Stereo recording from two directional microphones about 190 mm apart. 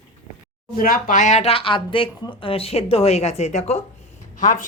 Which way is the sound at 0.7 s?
45° left (ahead or behind).